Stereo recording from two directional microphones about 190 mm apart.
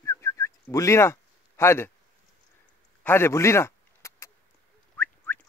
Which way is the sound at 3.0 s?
10° left (ahead or behind).